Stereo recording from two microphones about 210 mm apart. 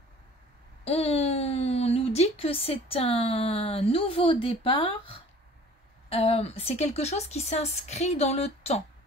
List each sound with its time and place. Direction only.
0.8 s a woman's voice: 30° left (ahead or behind)